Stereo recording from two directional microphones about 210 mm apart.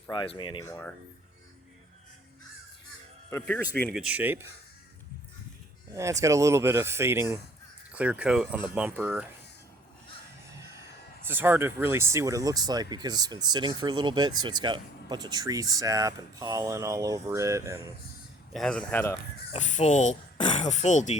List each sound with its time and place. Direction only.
0.1 s speech: 20° left (ahead or behind)
3.2 s speech: 10° left (ahead or behind)
4.0 s speech: 5° right (ahead or behind)
5.9 s speech: 15° right (ahead or behind)
11.3 s speech: 10° right (ahead or behind)
18.5 s speech: 5° left (ahead or behind)
19.5 s speech: 35° left (ahead or behind)